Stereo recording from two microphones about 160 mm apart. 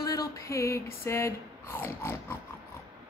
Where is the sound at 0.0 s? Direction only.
20° left (ahead or behind).